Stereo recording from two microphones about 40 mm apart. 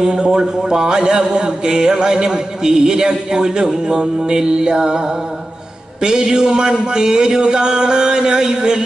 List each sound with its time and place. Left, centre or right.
0.0 s a man's voice: centre
6.0 s a man's voice: centre